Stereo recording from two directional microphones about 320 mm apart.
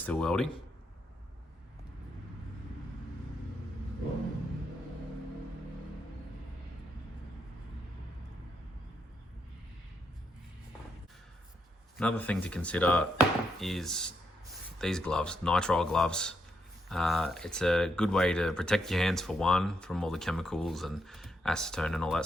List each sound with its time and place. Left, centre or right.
0.0 s speech: centre
11.9 s speech: centre